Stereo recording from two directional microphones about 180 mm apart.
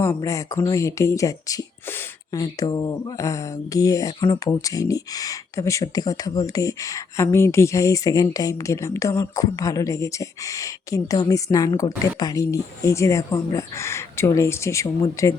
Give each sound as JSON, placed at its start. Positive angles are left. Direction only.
{"t": 0.0, "sound": "speech", "side_deg": 15}